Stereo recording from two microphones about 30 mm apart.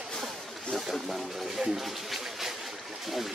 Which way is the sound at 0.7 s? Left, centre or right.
Centre.